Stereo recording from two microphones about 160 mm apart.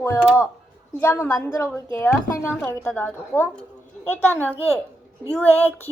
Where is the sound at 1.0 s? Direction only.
20° left (ahead or behind).